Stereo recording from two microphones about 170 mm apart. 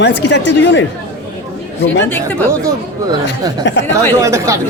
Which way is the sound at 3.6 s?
90° left.